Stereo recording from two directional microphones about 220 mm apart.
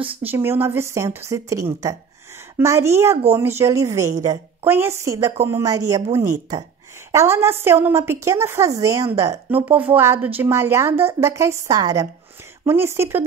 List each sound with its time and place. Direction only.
0.0 s speech: 25° right (ahead or behind)
0.3 s a woman's voice: 10° right (ahead or behind)
7.1 s a woman's voice: 10° right (ahead or behind)